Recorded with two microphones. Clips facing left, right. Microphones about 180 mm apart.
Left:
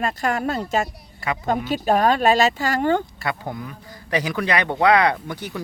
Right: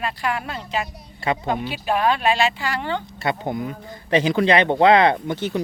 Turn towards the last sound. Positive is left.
turn(degrees=-25)  # may be behind; listen again after turning